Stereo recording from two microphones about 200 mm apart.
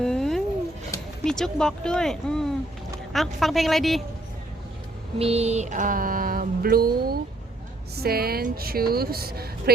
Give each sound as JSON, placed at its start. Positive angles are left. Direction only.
{"t": 0.0, "sound": "a sound", "side_deg": 0}
{"t": 1.2, "sound": "speech", "side_deg": 0}
{"t": 5.2, "sound": "mantra", "side_deg": -30}